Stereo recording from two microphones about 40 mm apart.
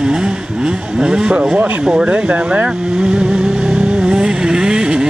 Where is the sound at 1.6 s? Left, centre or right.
Right.